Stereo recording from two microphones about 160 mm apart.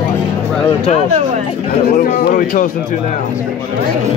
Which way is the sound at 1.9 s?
60° left (ahead or behind).